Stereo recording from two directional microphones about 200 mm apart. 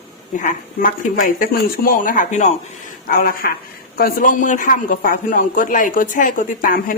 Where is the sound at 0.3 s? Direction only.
40° left (ahead or behind).